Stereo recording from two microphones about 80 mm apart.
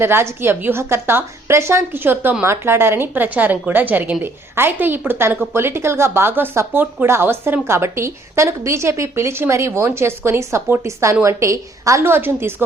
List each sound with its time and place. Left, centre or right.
0.0 s a woman's voice: right
12.1 s a woman's voice: right